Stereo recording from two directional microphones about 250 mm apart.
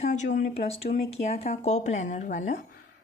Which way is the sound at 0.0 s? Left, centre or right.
Left.